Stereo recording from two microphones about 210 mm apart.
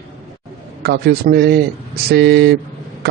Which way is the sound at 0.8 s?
50° right (ahead or behind).